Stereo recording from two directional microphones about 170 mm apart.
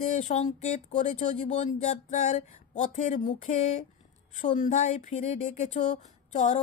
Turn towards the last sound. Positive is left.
turn(degrees=45)  # may be behind; listen again after turning